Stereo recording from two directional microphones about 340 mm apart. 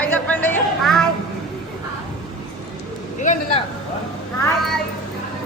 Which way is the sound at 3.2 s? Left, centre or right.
Left.